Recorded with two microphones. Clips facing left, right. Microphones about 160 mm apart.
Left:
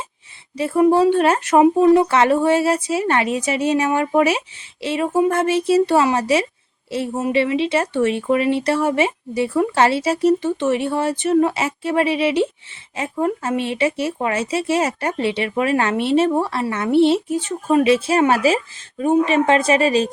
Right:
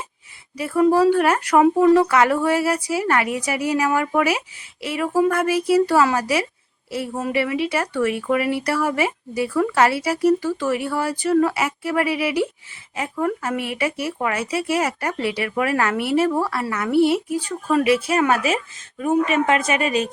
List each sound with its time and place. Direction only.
0.5 s speech: 25° left (ahead or behind)